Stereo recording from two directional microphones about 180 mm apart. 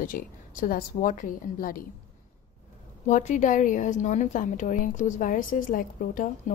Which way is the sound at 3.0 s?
45° left (ahead or behind).